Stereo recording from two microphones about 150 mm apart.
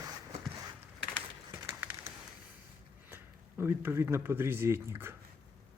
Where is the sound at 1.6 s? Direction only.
20° right (ahead or behind).